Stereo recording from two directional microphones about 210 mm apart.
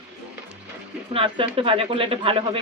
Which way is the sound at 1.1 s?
25° right (ahead or behind).